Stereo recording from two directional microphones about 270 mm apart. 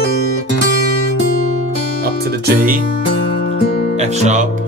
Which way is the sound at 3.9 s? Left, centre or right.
Right.